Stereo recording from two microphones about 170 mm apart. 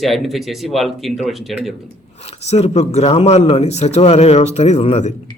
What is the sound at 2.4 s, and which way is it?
A man's voice, 40° left (ahead or behind).